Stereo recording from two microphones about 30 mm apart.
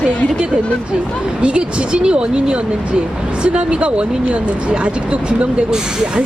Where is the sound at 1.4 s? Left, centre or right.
Right.